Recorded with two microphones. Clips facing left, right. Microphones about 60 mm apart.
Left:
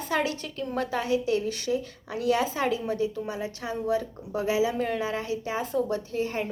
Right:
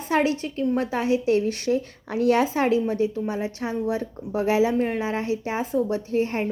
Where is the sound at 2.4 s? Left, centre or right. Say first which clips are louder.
Right 5 dB; right.